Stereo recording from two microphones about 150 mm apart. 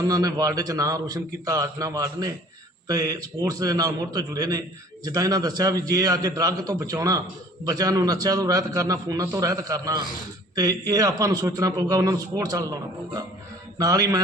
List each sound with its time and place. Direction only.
0.0 s a man's voice: 25° right (ahead or behind)